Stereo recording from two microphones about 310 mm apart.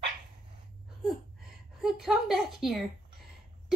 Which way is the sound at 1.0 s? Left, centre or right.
Centre.